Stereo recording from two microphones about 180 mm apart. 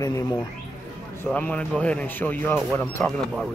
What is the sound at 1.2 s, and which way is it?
Speech, 10° left (ahead or behind).